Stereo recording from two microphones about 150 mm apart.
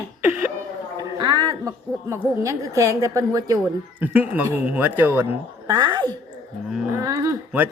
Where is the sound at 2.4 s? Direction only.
20° right (ahead or behind).